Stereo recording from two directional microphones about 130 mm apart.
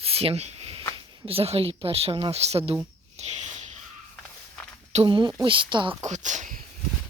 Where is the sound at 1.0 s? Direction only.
45° right (ahead or behind).